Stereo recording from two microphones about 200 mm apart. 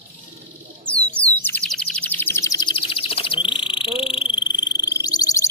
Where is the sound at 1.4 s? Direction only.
5° left (ahead or behind); by 4.2 s 25° left (ahead or behind).